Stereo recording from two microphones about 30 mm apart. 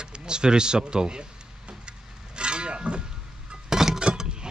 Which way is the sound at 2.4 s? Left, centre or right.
Right.